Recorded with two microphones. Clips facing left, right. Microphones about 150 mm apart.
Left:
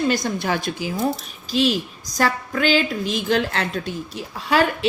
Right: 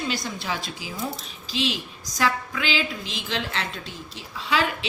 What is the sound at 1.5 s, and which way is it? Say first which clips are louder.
A woman's voice: left 8 dB; 45° left (ahead or behind).